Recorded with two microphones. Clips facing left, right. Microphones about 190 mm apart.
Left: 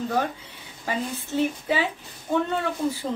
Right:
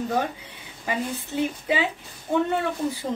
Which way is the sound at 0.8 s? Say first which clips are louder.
Right 1 dB; 15° right (ahead or behind).